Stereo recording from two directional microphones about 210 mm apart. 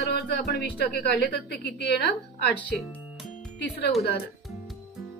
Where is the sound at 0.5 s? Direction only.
50° left (ahead or behind).